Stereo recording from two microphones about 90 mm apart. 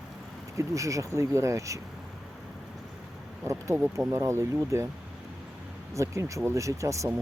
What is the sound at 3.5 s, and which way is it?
Speech, 35° right (ahead or behind).